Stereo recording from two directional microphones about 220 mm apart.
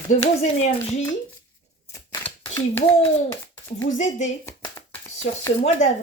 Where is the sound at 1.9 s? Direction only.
15° left (ahead or behind).